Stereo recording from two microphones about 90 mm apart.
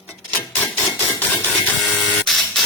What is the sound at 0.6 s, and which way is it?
Hammer, 20° left (ahead or behind).